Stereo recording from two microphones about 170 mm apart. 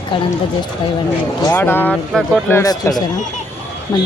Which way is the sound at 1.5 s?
10° left (ahead or behind).